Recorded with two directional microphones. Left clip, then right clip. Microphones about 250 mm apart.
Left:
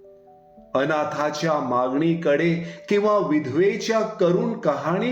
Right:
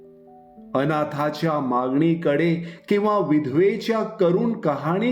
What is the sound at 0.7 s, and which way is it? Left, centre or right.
A man's voice, right.